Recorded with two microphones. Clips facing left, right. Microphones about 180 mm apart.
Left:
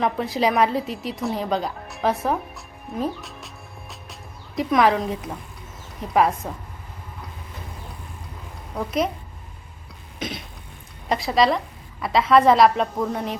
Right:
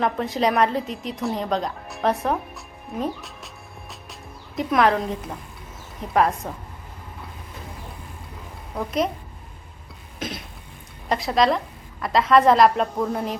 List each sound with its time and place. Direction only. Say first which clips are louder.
0.0 s a woman's voice: even; centre (ahead or behind)
3.0 s music: left 1 dB; centre (ahead or behind)
6.1 s a woman's voice: left 1 dB; 5° left (ahead or behind)
8.7 s a child's voice: even; centre (ahead or behind)
10.2 s cough: left 1 dB; centre (ahead or behind)
11.1 s a woman's voice: even; centre (ahead or behind)